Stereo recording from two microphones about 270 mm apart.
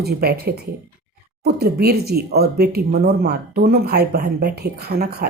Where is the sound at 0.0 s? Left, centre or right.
Right.